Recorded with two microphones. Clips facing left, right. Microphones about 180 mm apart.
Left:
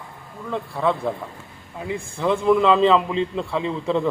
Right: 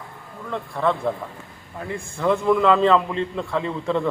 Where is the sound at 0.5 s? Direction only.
Centre (ahead or behind).